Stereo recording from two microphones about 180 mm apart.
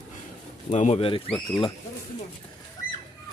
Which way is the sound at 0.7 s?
40° left (ahead or behind).